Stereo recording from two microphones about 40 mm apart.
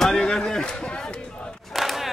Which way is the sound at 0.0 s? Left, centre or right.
Centre.